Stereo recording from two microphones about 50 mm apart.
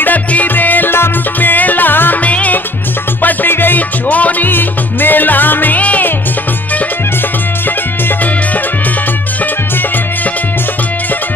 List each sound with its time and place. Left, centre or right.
0.0 s music: left
3.2 s music: left